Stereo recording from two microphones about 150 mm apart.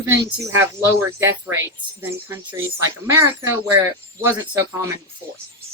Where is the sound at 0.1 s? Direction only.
20° right (ahead or behind).